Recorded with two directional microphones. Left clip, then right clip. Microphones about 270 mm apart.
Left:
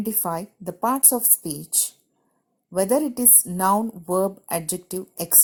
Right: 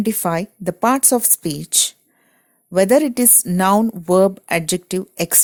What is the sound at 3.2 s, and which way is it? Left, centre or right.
Speech, right.